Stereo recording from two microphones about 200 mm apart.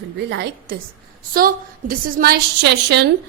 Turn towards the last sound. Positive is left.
turn(degrees=-60)  # may be behind; listen again after turning